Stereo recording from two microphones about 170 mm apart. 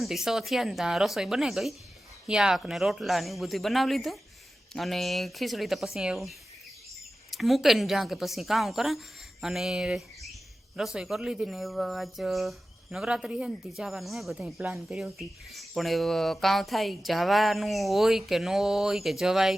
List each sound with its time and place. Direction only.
0.0 s a woman's voice: centre (ahead or behind)